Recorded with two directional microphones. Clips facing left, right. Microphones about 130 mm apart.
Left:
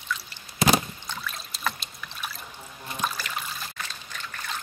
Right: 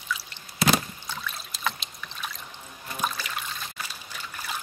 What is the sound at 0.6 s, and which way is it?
Rowboat, 20° left (ahead or behind).